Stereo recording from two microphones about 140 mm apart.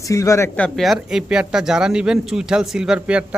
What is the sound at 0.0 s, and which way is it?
Speech, 20° left (ahead or behind).